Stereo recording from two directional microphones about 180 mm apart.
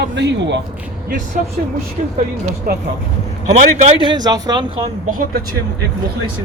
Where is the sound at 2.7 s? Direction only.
55° right (ahead or behind).